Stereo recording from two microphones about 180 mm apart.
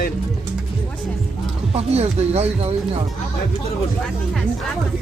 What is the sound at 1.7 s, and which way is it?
Speech, 35° right (ahead or behind).